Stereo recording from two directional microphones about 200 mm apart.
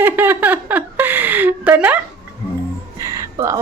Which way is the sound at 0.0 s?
10° right (ahead or behind).